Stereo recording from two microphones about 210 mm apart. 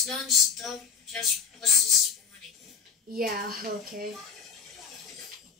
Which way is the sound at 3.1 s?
45° right (ahead or behind).